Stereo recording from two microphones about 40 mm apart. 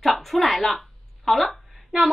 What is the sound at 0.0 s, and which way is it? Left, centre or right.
Speech, centre.